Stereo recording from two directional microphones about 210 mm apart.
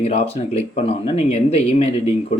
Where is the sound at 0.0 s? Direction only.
30° left (ahead or behind).